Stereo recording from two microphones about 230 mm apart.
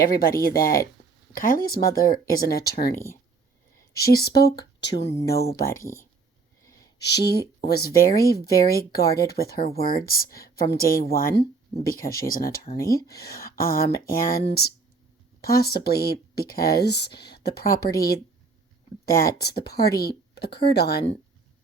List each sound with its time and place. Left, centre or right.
0.2 s a woman's voice: left
2.9 s speech: centre
3.9 s speech: left
7.0 s a woman's voice: left
12.7 s speech: centre
13.1 s a woman's voice: left